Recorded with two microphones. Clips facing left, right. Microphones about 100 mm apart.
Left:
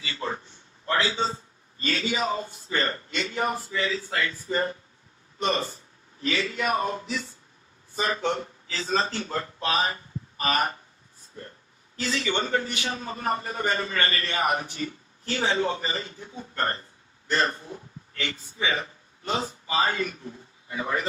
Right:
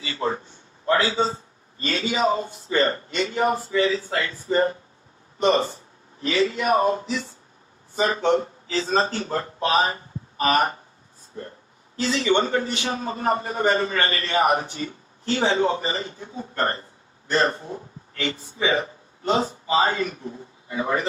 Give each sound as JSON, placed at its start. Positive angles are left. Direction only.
{"t": 0.0, "sound": "a man's voice", "side_deg": -30}
{"t": 1.8, "sound": "a man's voice", "side_deg": -30}